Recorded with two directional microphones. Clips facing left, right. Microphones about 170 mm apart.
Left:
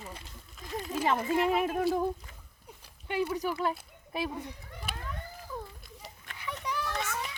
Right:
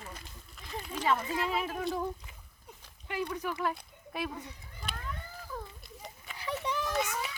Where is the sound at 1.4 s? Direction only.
50° left (ahead or behind).